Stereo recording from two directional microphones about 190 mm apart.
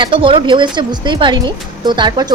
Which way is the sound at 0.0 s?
25° right (ahead or behind).